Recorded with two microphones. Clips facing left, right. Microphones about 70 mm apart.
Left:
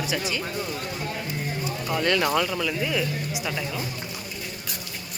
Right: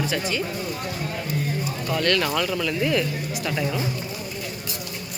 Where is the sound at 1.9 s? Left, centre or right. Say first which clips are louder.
Even; centre.